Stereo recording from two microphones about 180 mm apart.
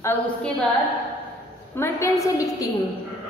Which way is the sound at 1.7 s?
15° left (ahead or behind).